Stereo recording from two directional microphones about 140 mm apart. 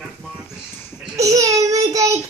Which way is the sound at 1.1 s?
25° right (ahead or behind).